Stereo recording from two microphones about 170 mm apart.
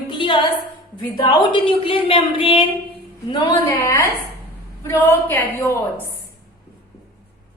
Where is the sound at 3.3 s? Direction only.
20° left (ahead or behind).